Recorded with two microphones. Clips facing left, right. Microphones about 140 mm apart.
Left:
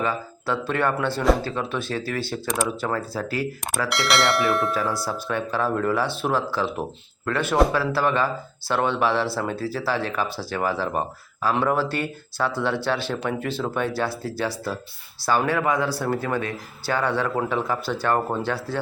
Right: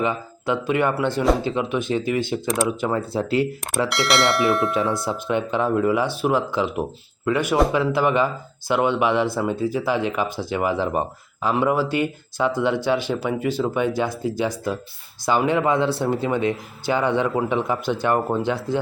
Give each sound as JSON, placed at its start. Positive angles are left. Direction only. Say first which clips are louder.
{"t": 0.0, "sound": "a man's voice", "louder": "right 2 dB", "side_deg": -20}
{"t": 3.8, "sound": "speech", "louder": "right 1 dB", "side_deg": 0}
{"t": 5.0, "sound": "a man's voice", "louder": "right 4 dB", "side_deg": -20}